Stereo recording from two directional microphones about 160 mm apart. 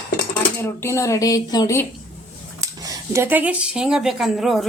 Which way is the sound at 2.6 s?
20° right (ahead or behind).